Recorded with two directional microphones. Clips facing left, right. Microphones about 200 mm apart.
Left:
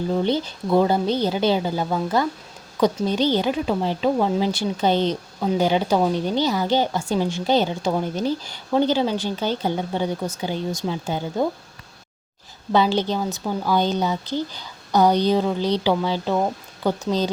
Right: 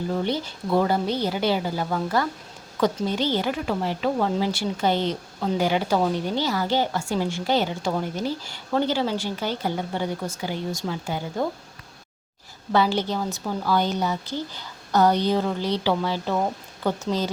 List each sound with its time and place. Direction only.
0.1 s a woman's voice: 20° left (ahead or behind)
12.7 s a woman's voice: 20° left (ahead or behind)